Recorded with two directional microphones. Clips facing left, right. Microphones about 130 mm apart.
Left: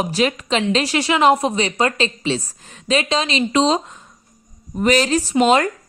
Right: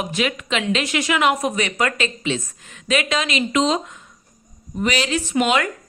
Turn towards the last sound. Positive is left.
turn(degrees=35)  # may be behind; listen again after turning